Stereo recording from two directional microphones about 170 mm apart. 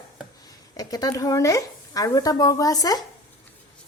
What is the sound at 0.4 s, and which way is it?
Speech, 20° left (ahead or behind).